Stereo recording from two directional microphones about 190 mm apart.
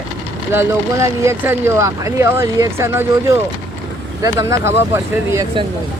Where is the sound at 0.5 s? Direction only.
15° right (ahead or behind).